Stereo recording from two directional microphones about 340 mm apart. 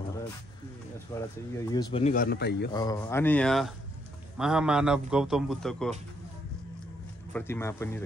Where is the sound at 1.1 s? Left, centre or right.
Centre; by 2.7 s left.